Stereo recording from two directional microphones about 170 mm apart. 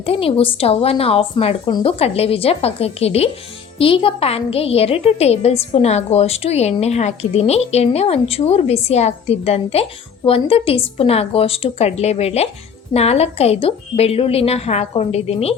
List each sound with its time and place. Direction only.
0.0 s a woman's voice: 35° left (ahead or behind)